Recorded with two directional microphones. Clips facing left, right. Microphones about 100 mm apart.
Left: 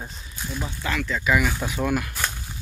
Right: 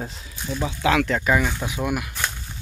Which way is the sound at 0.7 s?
90° right.